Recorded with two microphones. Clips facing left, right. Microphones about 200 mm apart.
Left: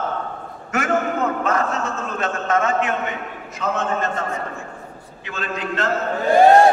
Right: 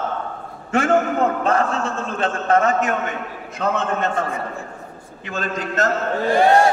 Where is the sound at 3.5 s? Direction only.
60° right (ahead or behind).